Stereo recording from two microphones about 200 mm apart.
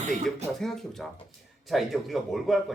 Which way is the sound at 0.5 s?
Centre (ahead or behind).